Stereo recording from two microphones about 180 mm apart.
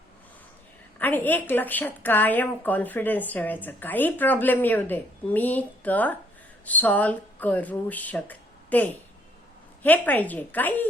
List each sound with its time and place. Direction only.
0.9 s a woman's voice: 10° left (ahead or behind)